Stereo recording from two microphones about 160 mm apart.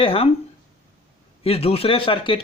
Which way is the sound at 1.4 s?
35° left (ahead or behind).